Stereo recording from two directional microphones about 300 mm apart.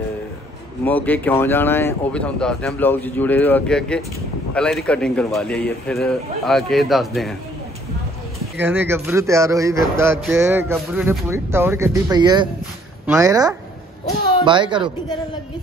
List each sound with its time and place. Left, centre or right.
0.8 s speech: centre
8.5 s speech: centre